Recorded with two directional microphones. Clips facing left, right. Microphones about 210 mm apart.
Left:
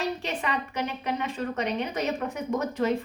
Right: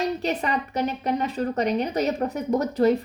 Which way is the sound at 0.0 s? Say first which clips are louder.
Right 5 dB; 40° right (ahead or behind).